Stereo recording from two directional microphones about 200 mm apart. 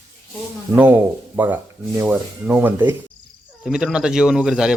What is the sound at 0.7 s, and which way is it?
Speech, 10° right (ahead or behind).